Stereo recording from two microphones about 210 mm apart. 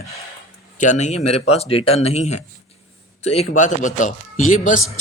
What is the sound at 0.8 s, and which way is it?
Speech, 35° left (ahead or behind).